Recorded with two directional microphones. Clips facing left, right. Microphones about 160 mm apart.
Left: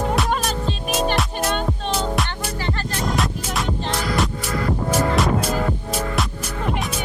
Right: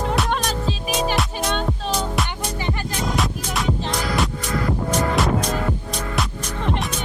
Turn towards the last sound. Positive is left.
turn(degrees=5)  # may be behind; listen again after turning